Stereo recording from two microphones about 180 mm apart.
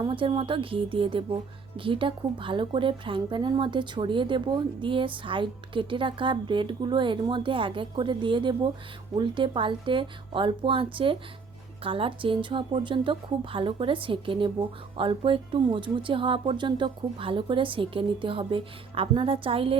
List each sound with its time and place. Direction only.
0.0 s speech: 30° right (ahead or behind)